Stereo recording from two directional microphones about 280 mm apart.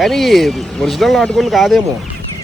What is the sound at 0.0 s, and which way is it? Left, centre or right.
Speech, centre.